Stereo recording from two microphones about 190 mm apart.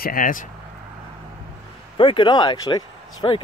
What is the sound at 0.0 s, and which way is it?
Speech, 45° left (ahead or behind).